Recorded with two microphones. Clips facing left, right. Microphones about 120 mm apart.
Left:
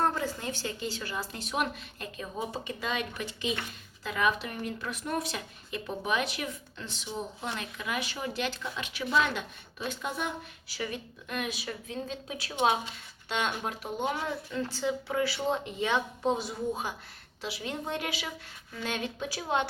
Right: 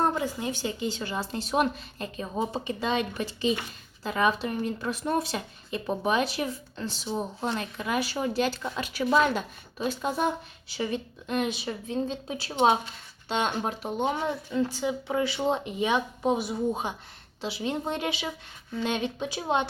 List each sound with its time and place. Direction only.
0.0 s a woman's voice: 15° right (ahead or behind)